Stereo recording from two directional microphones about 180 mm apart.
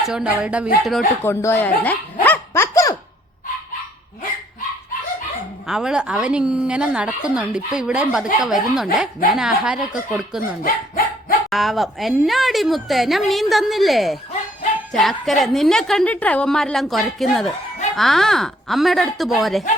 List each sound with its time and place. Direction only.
0.0 s a woman's voice: 5° right (ahead or behind)
1.2 s speech: 15° left (ahead or behind)
2.2 s a sound: 10° left (ahead or behind)
5.6 s a woman's voice: 5° right (ahead or behind)
10.6 s dog: 50° left (ahead or behind)
11.4 s a woman's voice: centre (ahead or behind)